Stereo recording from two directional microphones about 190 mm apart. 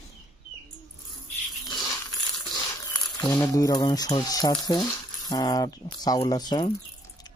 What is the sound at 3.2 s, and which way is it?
Speech, 15° left (ahead or behind).